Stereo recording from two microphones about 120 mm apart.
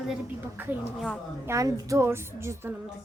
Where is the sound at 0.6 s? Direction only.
20° right (ahead or behind).